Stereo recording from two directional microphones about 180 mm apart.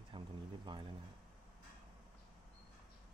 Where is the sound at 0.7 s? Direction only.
25° right (ahead or behind).